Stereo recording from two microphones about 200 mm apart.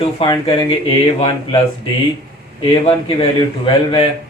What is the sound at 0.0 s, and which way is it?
Speech, 25° left (ahead or behind).